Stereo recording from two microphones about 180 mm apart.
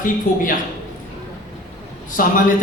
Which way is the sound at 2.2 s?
50° left (ahead or behind).